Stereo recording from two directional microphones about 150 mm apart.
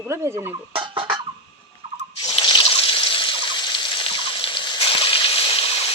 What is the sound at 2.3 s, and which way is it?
Trickle, 35° left (ahead or behind).